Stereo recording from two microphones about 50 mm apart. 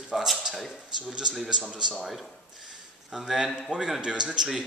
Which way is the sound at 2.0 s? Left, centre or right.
Centre.